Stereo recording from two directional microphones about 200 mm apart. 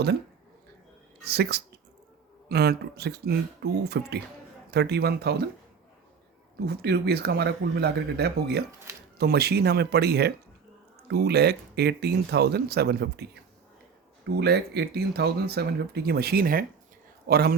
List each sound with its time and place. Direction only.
1.2 s speech: 50° right (ahead or behind)
6.7 s speech: 55° right (ahead or behind)
14.3 s speech: 55° right (ahead or behind)